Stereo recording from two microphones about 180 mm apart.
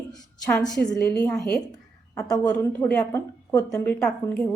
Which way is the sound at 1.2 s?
5° left (ahead or behind).